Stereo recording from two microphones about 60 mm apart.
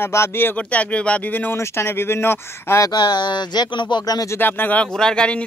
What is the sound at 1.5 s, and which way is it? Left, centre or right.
Speech, left.